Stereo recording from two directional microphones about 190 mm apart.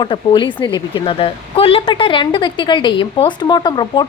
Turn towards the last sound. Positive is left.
turn(degrees=20)  # may be behind; listen again after turning